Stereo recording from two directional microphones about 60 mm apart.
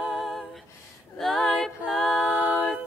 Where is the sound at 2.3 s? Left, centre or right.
Right.